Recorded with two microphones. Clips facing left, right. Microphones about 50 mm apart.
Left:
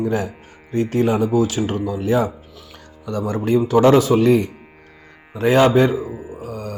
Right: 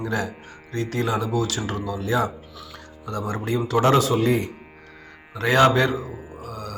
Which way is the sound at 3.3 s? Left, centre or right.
Right.